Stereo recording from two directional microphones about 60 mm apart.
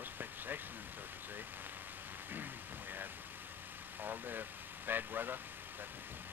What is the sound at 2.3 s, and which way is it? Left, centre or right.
Speech, right.